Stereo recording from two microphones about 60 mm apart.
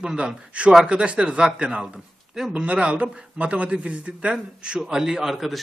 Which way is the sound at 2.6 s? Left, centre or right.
Centre.